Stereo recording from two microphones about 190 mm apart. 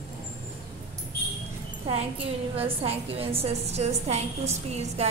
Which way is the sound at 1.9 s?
30° right (ahead or behind).